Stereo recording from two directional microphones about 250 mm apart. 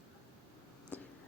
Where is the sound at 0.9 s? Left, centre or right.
Centre.